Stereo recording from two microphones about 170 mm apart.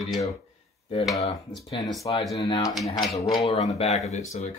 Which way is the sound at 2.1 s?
25° left (ahead or behind).